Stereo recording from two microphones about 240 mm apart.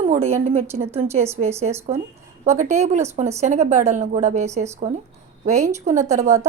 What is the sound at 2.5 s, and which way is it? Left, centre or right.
A woman's voice, right.